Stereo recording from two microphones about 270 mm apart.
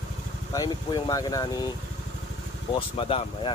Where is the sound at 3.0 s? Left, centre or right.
Left.